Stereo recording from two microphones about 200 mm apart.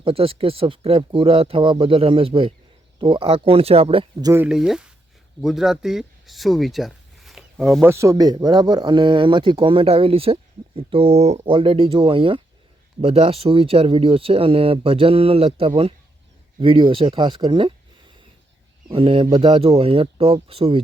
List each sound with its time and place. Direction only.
0.0 s speech: 30° right (ahead or behind)
4.3 s speech: 5° right (ahead or behind); by 17.7 s 25° right (ahead or behind)
18.9 s speech: 25° right (ahead or behind)